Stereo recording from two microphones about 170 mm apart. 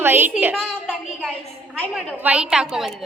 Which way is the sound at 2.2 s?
5° right (ahead or behind).